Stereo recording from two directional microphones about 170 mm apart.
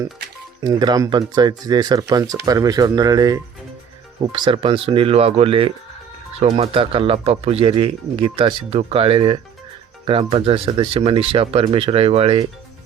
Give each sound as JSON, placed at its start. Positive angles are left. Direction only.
{"t": 0.6, "sound": "speech", "side_deg": -25}